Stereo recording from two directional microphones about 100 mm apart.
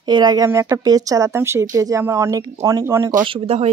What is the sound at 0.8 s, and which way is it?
Speech, 35° right (ahead or behind).